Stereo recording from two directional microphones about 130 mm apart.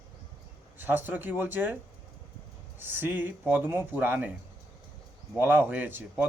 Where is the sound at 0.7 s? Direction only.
15° right (ahead or behind).